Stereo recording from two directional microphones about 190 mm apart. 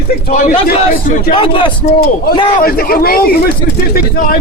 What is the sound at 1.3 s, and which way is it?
Speech, 30° left (ahead or behind).